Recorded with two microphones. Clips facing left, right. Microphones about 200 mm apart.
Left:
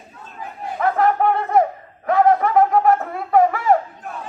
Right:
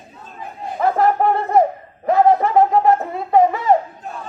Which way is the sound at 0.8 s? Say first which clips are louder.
Right 1 dB; 35° right (ahead or behind).